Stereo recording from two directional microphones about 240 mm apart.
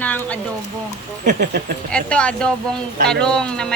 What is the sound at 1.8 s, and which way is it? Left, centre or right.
Speech, centre.